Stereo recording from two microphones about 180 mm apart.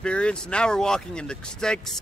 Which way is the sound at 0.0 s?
5° left (ahead or behind).